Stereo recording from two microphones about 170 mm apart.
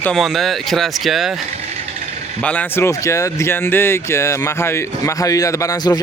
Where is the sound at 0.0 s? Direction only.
Centre (ahead or behind).